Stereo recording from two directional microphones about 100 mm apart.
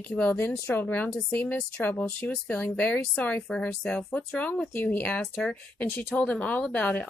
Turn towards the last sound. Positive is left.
turn(degrees=15)  # may be behind; listen again after turning